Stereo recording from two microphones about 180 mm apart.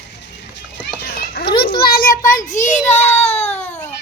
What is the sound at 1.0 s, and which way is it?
Children playing, 60° left (ahead or behind).